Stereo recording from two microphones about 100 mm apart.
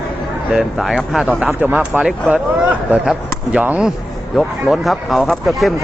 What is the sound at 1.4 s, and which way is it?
Speech, 20° right (ahead or behind).